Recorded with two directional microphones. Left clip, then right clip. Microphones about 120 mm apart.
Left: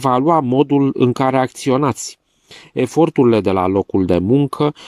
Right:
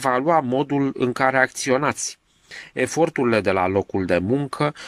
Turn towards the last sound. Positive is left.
turn(degrees=25)  # may be behind; listen again after turning